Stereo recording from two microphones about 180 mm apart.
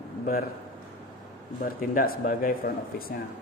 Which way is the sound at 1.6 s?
55° left (ahead or behind).